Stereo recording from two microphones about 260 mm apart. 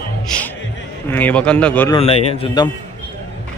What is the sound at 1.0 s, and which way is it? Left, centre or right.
Speech, centre.